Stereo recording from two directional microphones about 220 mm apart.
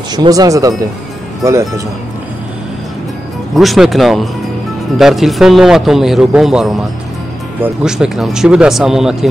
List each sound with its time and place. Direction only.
0.1 s speech: 20° right (ahead or behind)
3.5 s speech: centre (ahead or behind)